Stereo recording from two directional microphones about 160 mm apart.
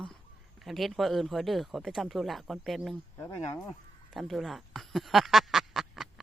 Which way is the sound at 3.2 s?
20° left (ahead or behind).